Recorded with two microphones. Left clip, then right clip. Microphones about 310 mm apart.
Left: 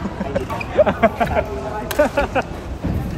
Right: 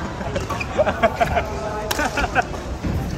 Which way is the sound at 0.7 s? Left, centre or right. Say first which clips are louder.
Left 4 dB; left.